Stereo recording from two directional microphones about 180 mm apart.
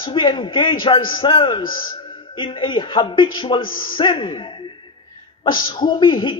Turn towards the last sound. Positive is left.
turn(degrees=25)  # may be behind; listen again after turning